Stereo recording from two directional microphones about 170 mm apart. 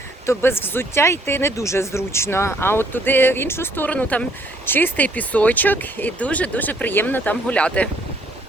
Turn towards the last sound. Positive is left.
turn(degrees=5)  # may be behind; listen again after turning